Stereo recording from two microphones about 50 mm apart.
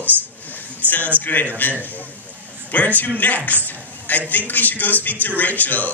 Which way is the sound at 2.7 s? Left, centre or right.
Left.